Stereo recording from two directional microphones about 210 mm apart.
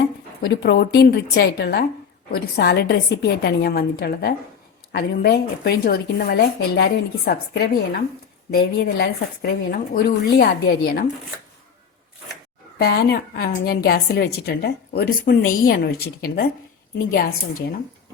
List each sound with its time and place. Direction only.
0.4 s a woman's voice: 50° left (ahead or behind)
12.8 s a woman's voice: 50° left (ahead or behind)